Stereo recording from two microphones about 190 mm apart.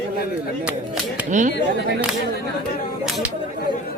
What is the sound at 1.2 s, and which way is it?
Speech, 40° right (ahead or behind).